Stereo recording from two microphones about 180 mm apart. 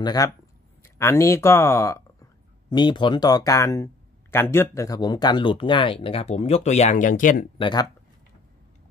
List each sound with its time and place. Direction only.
0.0 s speech: 20° left (ahead or behind); by 7.4 s 45° left (ahead or behind)
7.5 s speech: 25° left (ahead or behind)